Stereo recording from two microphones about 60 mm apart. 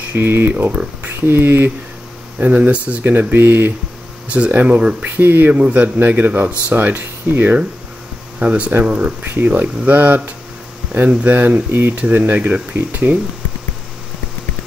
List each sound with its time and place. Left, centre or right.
0.1 s speech: right
2.3 s speech: right
4.3 s speech: right
5.0 s speech: right
5.5 s speech: right
8.4 s speech: right
9.4 s speech: right
12.1 s speech: right